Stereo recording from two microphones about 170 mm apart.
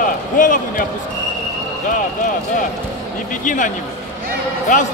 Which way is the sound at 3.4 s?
50° left (ahead or behind).